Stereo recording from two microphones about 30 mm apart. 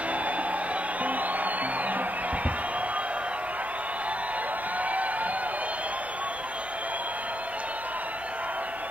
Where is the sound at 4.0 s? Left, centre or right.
Right.